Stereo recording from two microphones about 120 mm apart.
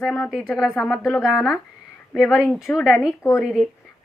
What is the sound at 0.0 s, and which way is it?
Speech, centre (ahead or behind).